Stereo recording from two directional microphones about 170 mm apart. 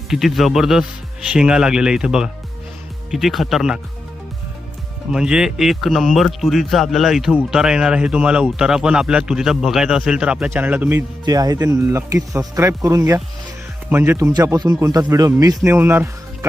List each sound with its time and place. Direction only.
0.1 s speech: centre (ahead or behind)
5.1 s speech: 5° right (ahead or behind)